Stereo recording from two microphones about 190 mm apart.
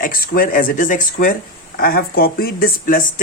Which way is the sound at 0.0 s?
50° left (ahead or behind).